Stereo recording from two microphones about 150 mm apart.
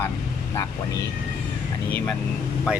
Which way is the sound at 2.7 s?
5° right (ahead or behind).